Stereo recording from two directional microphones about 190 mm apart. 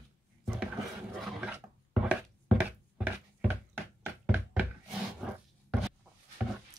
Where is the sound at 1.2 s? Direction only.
5° right (ahead or behind).